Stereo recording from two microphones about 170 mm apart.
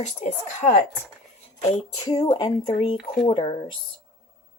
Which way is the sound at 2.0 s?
20° left (ahead or behind).